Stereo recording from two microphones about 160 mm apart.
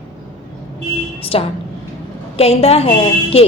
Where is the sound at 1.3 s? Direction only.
35° left (ahead or behind).